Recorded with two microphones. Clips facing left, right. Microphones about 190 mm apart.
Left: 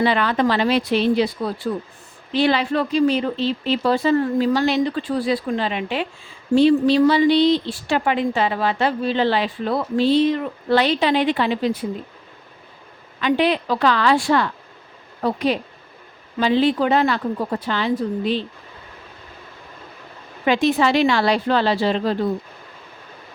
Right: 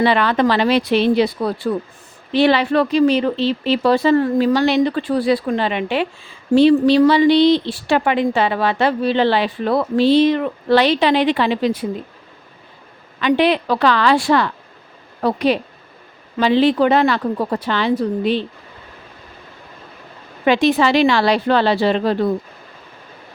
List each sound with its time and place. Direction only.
0.0 s a woman's voice: 75° right (ahead or behind)
13.2 s a woman's voice: 75° right (ahead or behind); by 14.5 s 90° right
15.2 s a woman's voice: 75° right (ahead or behind)
20.4 s a woman's voice: 80° right